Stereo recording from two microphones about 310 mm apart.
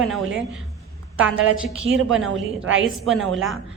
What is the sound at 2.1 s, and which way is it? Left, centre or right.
A woman's voice, centre.